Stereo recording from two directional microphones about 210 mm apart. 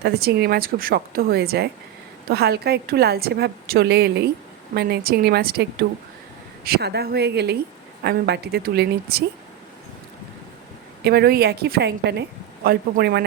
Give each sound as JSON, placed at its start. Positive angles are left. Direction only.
{"t": 0.0, "sound": "a woman's voice", "side_deg": -50}
{"t": 11.0, "sound": "a woman's voice", "side_deg": -50}